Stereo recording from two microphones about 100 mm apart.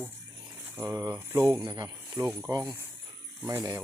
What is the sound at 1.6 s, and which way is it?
Speech, 45° right (ahead or behind).